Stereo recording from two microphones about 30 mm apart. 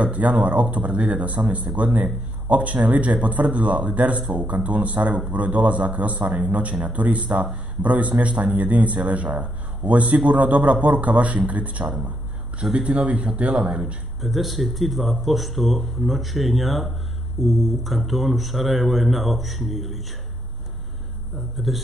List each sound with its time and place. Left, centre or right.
0.0 s a man's voice: right
12.6 s speech: centre
13.0 s speech: right
14.2 s speech: centre
21.4 s speech: centre